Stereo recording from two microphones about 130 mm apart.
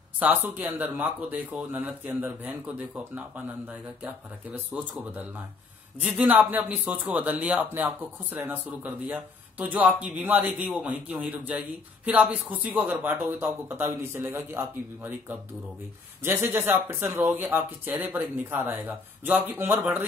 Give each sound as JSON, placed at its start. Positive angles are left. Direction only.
{"t": 0.2, "sound": "speech", "side_deg": -15}
{"t": 5.9, "sound": "speech", "side_deg": -10}